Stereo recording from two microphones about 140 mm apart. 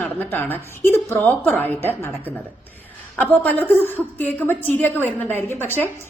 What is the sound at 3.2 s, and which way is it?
A woman's voice, 10° left (ahead or behind).